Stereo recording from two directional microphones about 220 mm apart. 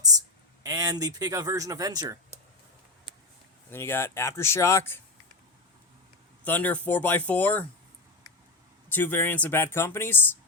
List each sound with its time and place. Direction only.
0.6 s speech: 15° right (ahead or behind)
3.7 s speech: 10° left (ahead or behind)
6.4 s speech: 5° left (ahead or behind)
8.9 s speech: 10° left (ahead or behind)